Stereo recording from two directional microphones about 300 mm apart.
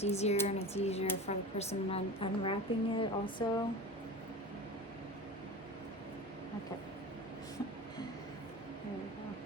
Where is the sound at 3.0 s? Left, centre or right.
Centre.